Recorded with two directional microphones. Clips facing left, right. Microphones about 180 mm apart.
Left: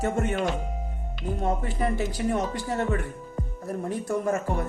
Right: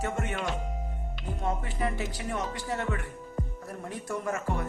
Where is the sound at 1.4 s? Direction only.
40° left (ahead or behind).